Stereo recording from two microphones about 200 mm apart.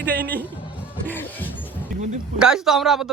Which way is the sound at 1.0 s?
10° left (ahead or behind).